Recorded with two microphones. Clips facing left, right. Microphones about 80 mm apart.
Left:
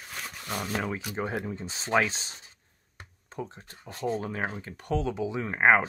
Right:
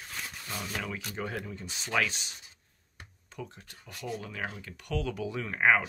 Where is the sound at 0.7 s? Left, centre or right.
Left.